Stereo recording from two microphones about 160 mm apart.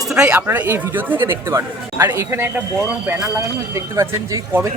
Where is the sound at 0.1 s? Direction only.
5° right (ahead or behind).